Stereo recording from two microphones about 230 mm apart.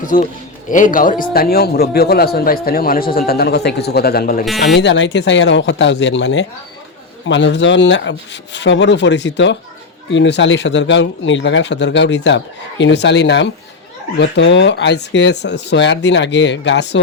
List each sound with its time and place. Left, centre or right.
0.0 s a man's voice: left
4.7 s a man's voice: left